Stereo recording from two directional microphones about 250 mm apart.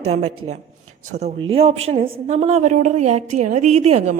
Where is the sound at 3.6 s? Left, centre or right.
Right.